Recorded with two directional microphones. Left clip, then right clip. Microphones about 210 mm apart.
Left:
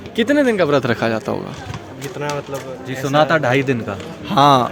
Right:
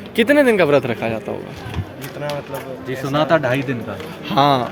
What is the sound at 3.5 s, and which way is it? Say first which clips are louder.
Speech: left 4 dB; 45° left (ahead or behind).